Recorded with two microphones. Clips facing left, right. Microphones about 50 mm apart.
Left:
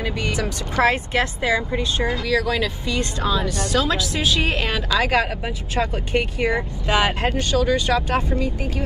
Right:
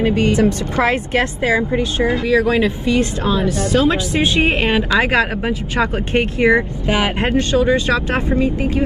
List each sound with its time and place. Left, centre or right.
0.0 s speech: right